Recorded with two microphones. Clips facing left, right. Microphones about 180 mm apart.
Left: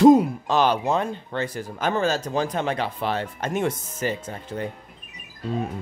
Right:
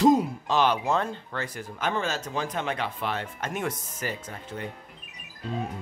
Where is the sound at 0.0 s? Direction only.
50° left (ahead or behind).